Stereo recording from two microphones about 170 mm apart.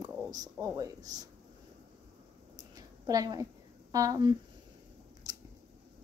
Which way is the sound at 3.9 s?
20° right (ahead or behind).